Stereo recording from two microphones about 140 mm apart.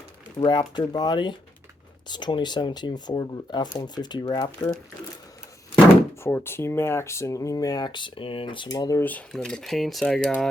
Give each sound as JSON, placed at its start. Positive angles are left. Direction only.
{"t": 0.3, "sound": "speech", "side_deg": 30}
{"t": 6.2, "sound": "speech", "side_deg": 15}
{"t": 9.0, "sound": "speech", "side_deg": 5}